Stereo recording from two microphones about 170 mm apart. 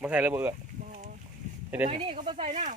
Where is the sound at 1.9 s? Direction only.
35° right (ahead or behind).